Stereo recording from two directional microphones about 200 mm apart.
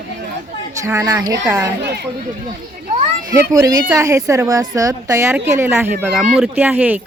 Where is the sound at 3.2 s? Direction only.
20° right (ahead or behind).